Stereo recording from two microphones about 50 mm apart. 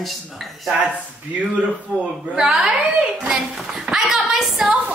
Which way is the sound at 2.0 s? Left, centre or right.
Right.